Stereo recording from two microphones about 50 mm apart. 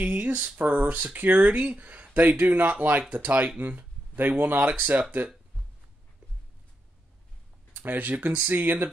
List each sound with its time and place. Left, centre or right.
0.0 s a sound: right
0.5 s speech: right
7.7 s speech: right